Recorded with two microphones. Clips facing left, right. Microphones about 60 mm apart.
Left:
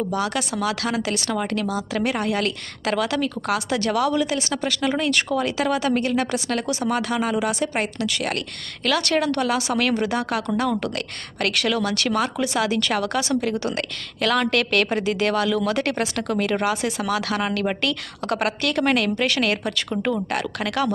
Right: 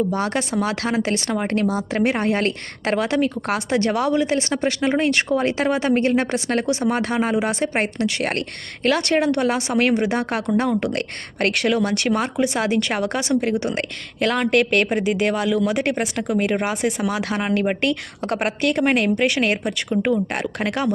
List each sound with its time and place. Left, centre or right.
0.1 s speech: right
10.7 s speech: centre
10.9 s a woman's voice: right